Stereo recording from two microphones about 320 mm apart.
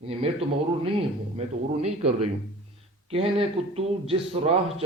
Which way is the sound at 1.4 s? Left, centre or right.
Centre.